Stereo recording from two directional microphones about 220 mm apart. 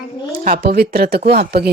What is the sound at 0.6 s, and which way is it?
Speech, 45° right (ahead or behind).